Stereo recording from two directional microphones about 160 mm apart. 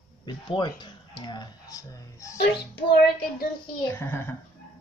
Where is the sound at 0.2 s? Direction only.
30° left (ahead or behind).